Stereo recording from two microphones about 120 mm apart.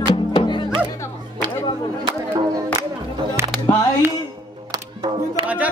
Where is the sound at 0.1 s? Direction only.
45° left (ahead or behind).